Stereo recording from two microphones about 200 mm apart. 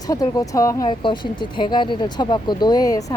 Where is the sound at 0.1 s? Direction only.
15° left (ahead or behind).